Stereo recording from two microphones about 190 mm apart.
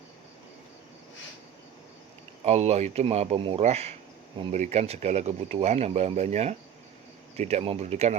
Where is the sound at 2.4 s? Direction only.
35° right (ahead or behind).